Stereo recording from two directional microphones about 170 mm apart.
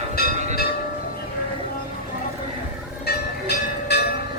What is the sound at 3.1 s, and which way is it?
Train, 75° left (ahead or behind).